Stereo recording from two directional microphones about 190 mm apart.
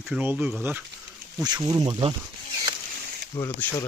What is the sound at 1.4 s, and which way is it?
Speech, 20° right (ahead or behind).